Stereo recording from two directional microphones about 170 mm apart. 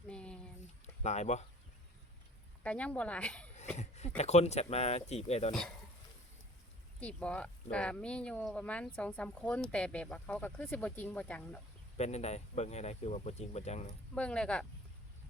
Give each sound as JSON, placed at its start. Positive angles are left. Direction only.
{"t": 0.1, "sound": "a sound", "side_deg": 5}
{"t": 1.0, "sound": "speech", "side_deg": 40}
{"t": 2.6, "sound": "speech", "side_deg": 5}
{"t": 3.8, "sound": "a sound", "side_deg": 40}
{"t": 4.2, "sound": "speech", "side_deg": 40}
{"t": 7.0, "sound": "speech", "side_deg": 5}
{"t": 11.9, "sound": "speech", "side_deg": 40}
{"t": 14.2, "sound": "speech", "side_deg": 5}